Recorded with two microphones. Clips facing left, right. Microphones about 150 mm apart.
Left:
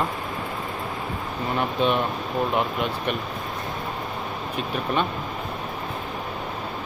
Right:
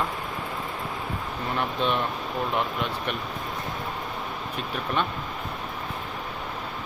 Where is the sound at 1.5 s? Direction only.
5° left (ahead or behind).